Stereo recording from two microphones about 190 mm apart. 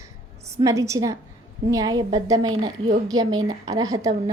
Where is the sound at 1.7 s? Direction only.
20° right (ahead or behind).